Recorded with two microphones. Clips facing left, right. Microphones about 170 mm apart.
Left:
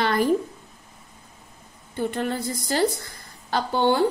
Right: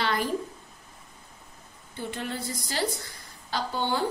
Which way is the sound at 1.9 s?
50° left (ahead or behind).